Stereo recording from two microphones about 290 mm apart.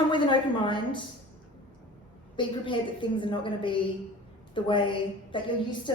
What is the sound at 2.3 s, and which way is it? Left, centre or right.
A woman's voice, centre.